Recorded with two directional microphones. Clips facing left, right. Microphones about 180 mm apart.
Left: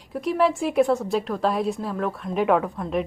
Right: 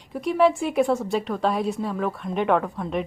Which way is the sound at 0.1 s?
Centre (ahead or behind).